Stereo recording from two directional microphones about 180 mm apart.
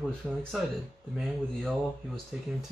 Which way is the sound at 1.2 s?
Centre (ahead or behind).